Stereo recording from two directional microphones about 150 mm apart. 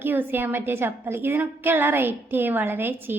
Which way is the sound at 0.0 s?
15° right (ahead or behind).